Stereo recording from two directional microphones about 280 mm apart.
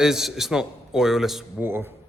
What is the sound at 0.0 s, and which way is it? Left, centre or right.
A man's voice, centre.